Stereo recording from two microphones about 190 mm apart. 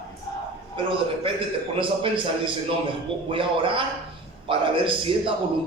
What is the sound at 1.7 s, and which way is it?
A man's voice, 25° right (ahead or behind).